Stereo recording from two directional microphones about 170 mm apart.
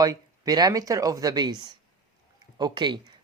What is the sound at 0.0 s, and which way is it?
Speech, 20° right (ahead or behind).